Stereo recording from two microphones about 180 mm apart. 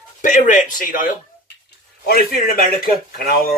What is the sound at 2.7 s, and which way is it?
Speech, 55° left (ahead or behind).